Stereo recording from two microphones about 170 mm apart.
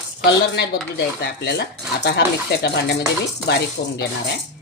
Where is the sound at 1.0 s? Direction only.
70° left (ahead or behind).